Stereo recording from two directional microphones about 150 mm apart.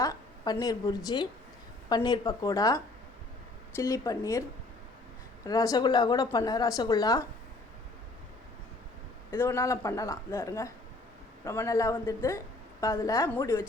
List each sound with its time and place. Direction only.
0.0 s a sound: 25° left (ahead or behind)
0.6 s a woman's voice: 25° left (ahead or behind)
5.5 s a woman's voice: 25° left (ahead or behind)
9.3 s a woman's voice: 15° left (ahead or behind)